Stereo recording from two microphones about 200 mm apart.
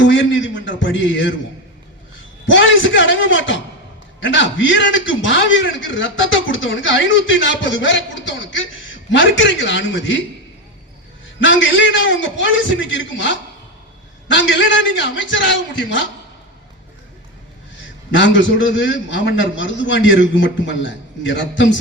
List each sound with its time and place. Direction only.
0.0 s a man's voice: 70° left (ahead or behind)
2.5 s a man's voice: 70° left (ahead or behind)
9.0 s a man's voice: 65° left (ahead or behind)
11.3 s a man's voice: 65° left (ahead or behind)
14.3 s a man's voice: 65° left (ahead or behind)
18.2 s a man's voice: 65° left (ahead or behind)